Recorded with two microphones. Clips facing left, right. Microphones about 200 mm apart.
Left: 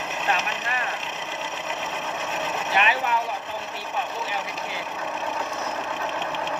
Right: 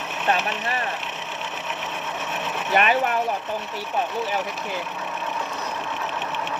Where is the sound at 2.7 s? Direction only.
50° right (ahead or behind).